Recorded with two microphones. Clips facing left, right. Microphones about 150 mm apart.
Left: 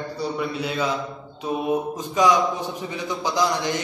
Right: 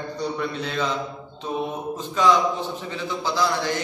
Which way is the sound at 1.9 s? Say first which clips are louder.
Right 2 dB; 15° left (ahead or behind).